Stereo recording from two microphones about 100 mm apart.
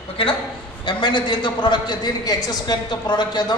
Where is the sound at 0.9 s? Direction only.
50° left (ahead or behind).